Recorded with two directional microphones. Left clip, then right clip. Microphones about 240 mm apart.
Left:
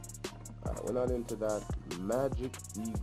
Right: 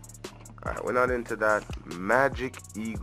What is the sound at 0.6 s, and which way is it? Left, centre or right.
Music, centre.